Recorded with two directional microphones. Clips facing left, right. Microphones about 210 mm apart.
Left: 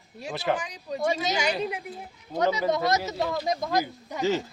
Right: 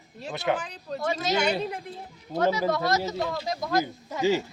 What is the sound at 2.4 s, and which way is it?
Speech, 20° left (ahead or behind).